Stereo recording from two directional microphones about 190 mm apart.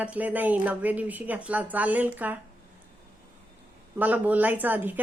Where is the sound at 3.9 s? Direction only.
10° right (ahead or behind).